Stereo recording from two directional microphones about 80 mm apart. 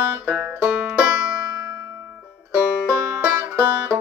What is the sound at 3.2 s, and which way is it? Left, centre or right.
Music, right.